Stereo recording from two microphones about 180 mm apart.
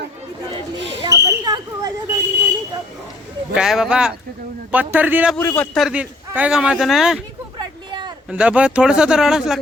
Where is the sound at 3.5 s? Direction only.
5° right (ahead or behind).